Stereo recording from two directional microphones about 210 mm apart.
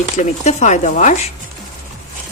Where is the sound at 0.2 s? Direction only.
35° left (ahead or behind).